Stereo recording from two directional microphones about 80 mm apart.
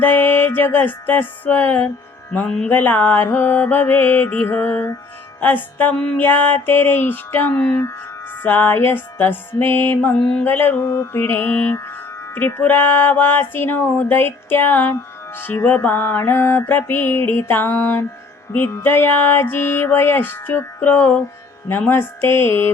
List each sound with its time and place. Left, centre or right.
0.0 s music: left
10.8 s mantra: left
11.2 s music: left